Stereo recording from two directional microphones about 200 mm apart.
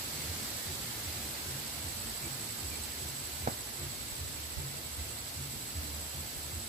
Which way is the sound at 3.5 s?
40° right (ahead or behind).